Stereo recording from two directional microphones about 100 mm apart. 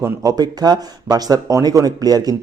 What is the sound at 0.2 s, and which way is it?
Speech, 40° right (ahead or behind).